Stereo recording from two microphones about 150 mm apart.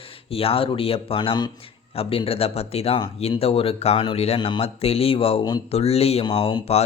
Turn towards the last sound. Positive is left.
turn(degrees=40)  # may be behind; listen again after turning